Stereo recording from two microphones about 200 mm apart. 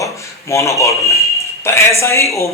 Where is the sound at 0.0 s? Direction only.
15° left (ahead or behind).